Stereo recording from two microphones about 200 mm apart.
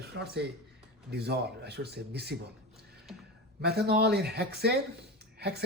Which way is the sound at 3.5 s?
50° right (ahead or behind).